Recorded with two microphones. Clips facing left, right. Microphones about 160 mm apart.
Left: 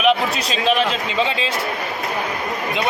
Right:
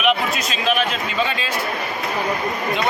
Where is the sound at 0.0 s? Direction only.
30° left (ahead or behind).